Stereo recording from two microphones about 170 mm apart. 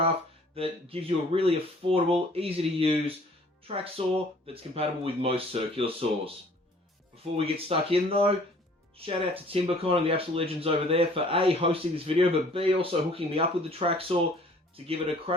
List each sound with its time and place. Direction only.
0.5 s speech: 35° right (ahead or behind)
4.4 s speech: 35° right (ahead or behind)
7.3 s speech: 35° right (ahead or behind)